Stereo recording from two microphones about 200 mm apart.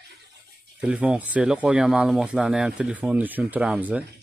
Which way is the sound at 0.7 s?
5° right (ahead or behind).